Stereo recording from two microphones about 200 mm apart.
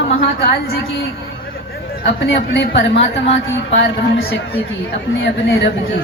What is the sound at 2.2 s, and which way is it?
Speech, 60° left (ahead or behind).